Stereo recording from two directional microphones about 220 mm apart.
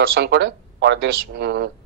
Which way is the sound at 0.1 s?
50° right (ahead or behind).